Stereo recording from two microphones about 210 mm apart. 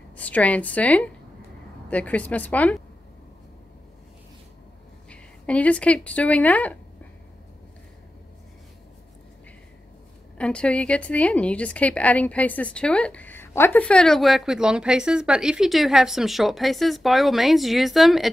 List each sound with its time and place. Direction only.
0.1 s a woman's voice: 5° left (ahead or behind)
5.1 s speech: 5° left (ahead or behind)
10.3 s a woman's voice: 5° left (ahead or behind)